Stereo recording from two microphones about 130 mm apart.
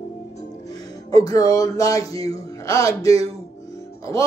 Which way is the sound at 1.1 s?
30° left (ahead or behind).